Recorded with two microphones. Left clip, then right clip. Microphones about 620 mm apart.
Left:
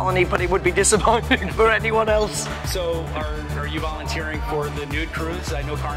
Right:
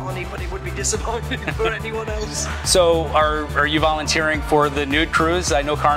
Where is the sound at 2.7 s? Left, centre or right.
Right.